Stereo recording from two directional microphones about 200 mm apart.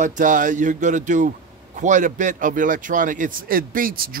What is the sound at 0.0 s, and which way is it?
A man's voice, 40° right (ahead or behind).